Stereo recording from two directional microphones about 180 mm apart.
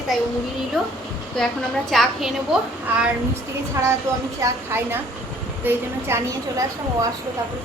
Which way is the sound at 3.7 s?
15° right (ahead or behind).